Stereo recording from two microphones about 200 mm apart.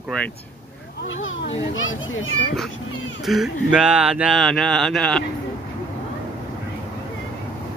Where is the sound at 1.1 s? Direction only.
75° left (ahead or behind).